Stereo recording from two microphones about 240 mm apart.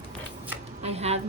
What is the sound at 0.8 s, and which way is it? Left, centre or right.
Speech, right.